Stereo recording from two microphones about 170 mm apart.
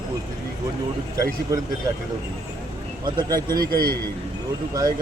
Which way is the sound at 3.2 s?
20° right (ahead or behind).